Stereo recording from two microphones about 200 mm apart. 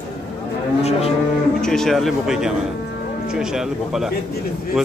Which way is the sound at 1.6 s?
Centre (ahead or behind).